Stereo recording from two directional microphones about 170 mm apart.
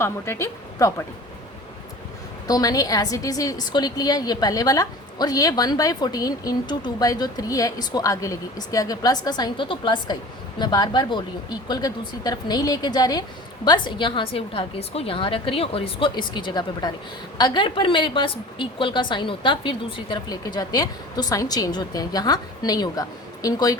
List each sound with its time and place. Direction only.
0.0 s speech: 15° left (ahead or behind)
2.5 s a woman's voice: 20° left (ahead or behind)